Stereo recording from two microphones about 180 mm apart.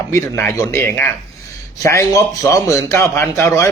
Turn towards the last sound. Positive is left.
turn(degrees=15)  # may be behind; listen again after turning